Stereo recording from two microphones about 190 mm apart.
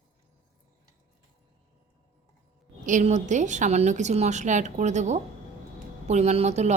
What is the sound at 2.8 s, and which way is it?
A woman's voice, 40° right (ahead or behind).